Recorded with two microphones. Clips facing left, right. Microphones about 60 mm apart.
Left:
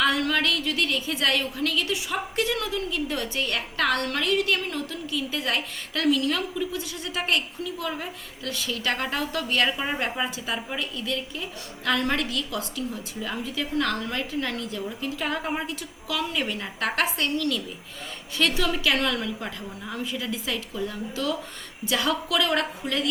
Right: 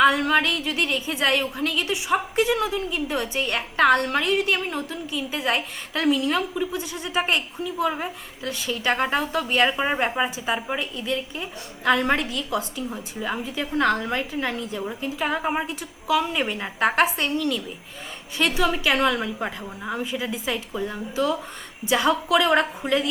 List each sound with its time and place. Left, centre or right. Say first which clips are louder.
0.0 s a woman's voice: right 5 dB; right